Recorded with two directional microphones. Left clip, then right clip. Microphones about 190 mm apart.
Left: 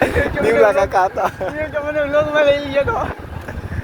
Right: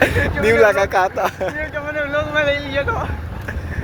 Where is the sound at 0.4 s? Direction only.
5° left (ahead or behind).